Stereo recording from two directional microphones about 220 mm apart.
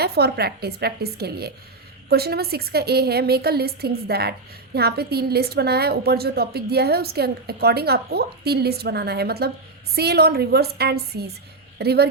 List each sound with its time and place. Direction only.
0.0 s a woman's voice: 45° right (ahead or behind)